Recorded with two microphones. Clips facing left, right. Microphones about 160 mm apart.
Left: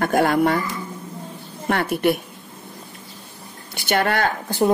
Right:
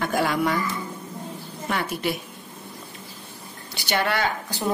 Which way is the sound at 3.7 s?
55° left (ahead or behind).